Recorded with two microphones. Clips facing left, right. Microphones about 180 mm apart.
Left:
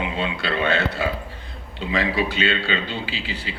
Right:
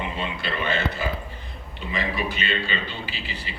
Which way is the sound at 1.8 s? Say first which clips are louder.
Left 5 dB; 85° left.